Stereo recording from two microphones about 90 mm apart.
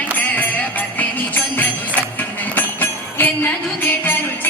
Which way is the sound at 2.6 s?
20° left (ahead or behind).